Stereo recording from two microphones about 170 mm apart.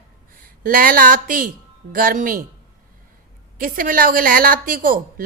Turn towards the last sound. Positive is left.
turn(degrees=-55)  # may be behind; listen again after turning